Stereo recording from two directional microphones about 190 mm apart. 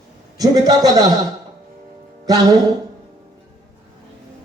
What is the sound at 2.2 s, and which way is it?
Music, 20° right (ahead or behind).